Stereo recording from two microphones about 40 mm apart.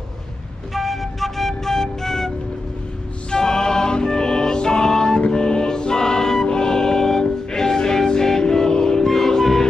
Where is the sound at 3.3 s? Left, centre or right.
Centre.